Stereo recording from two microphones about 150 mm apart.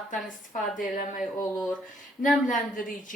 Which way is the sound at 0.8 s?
60° left (ahead or behind).